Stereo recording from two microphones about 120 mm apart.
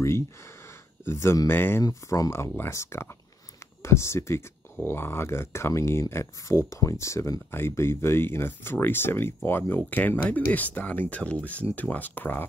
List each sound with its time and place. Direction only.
1.2 s speech: 25° left (ahead or behind)
1.9 s speech: 30° left (ahead or behind)